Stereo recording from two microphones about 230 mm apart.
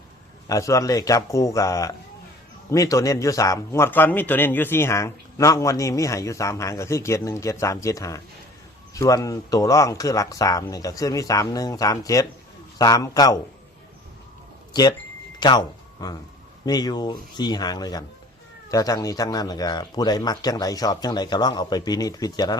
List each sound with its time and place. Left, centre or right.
0.4 s a man's voice: centre
14.7 s a sound: centre
15.4 s a man's voice: centre